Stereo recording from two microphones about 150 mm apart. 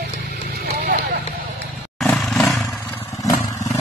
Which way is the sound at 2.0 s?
Centre (ahead or behind).